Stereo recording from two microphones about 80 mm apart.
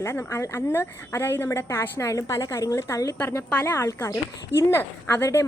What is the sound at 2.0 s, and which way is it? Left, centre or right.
A woman's voice, left.